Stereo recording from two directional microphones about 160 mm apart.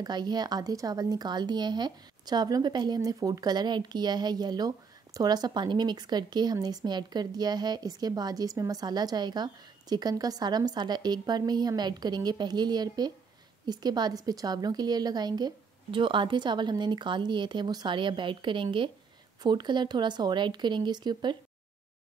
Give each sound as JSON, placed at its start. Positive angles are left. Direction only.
{"t": 0.0, "sound": "speech", "side_deg": -25}